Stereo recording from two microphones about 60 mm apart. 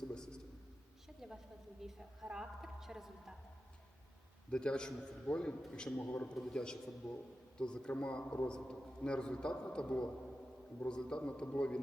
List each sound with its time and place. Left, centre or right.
0.1 s a sound: centre
1.2 s a sound: centre
1.8 s a woman's voice: centre
4.5 s a man's voice: centre
6.0 s a man's voice: left
6.3 s a man's voice: centre